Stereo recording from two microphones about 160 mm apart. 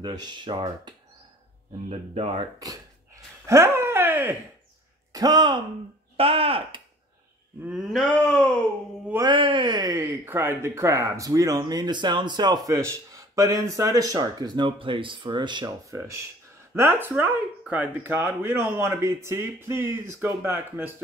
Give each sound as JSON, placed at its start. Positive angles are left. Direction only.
{"t": 0.0, "sound": "speech", "side_deg": -25}
{"t": 1.9, "sound": "speech", "side_deg": -35}
{"t": 3.4, "sound": "a sound", "side_deg": -15}
{"t": 5.1, "sound": "speech", "side_deg": -25}
{"t": 6.1, "sound": "speech", "side_deg": -35}
{"t": 7.6, "sound": "a sound", "side_deg": -5}
{"t": 9.2, "sound": "speech", "side_deg": -30}
{"t": 16.7, "sound": "speech", "side_deg": -15}